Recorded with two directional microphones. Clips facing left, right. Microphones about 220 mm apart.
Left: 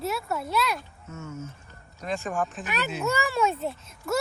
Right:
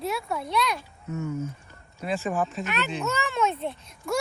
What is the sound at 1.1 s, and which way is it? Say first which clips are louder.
Speech: right 8 dB; 15° right (ahead or behind).